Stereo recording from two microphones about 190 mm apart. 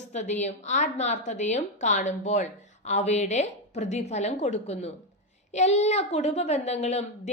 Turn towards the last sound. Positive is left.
turn(degrees=35)  # may be behind; listen again after turning